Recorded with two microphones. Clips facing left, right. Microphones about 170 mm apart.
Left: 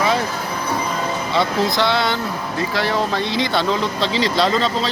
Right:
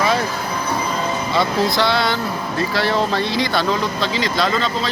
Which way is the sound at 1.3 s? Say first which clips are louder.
Even; 20° left (ahead or behind).